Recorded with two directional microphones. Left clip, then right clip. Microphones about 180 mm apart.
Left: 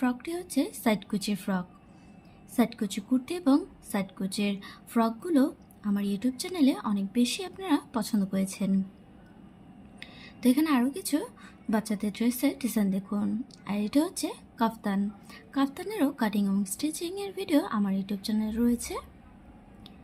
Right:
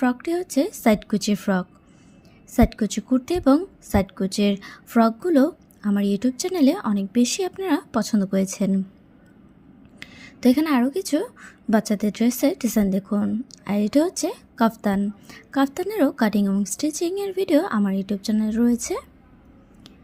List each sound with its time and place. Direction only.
0.0 s a woman's voice: 35° right (ahead or behind)
10.0 s a woman's voice: 35° right (ahead or behind)